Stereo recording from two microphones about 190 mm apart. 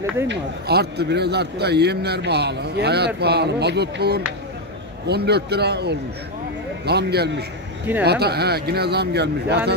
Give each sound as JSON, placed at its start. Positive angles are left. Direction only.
{"t": 0.3, "sound": "a man's voice", "side_deg": -60}